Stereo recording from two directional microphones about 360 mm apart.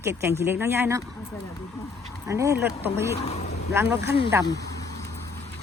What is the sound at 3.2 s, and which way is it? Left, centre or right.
Speech, centre.